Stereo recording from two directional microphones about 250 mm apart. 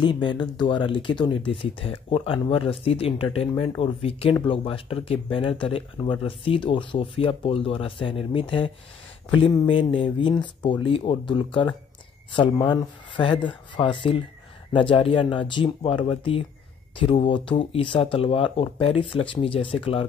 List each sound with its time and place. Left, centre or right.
0.0 s speech: centre